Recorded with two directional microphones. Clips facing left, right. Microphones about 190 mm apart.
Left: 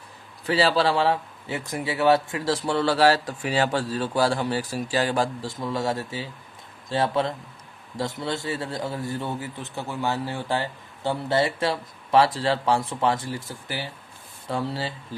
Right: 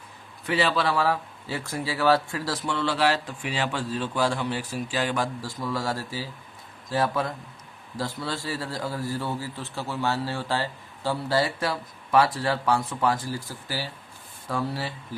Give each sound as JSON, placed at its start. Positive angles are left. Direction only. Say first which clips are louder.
{"t": 0.4, "sound": "a man's voice", "louder": "left 3 dB", "side_deg": 35}